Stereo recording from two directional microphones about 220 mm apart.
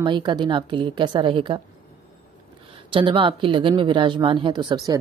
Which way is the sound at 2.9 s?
25° right (ahead or behind).